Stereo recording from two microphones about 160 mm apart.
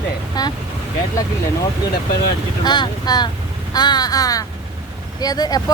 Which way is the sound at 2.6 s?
25° left (ahead or behind).